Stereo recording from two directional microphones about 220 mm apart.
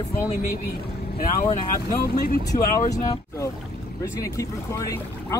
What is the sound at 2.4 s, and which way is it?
Speech, 15° left (ahead or behind).